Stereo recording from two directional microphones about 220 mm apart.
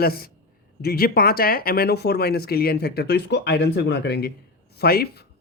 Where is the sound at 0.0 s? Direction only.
45° left (ahead or behind).